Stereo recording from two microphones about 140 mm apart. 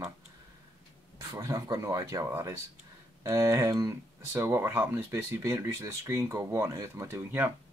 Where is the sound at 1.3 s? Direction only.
25° right (ahead or behind).